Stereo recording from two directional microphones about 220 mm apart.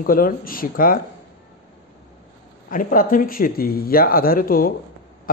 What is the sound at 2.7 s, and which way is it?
A man's voice, 40° left (ahead or behind).